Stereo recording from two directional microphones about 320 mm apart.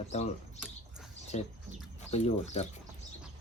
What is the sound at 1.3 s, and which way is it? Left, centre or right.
Speech, left.